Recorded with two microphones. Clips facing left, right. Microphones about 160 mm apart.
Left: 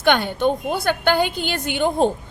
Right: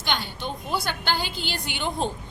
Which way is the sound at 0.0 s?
60° left (ahead or behind).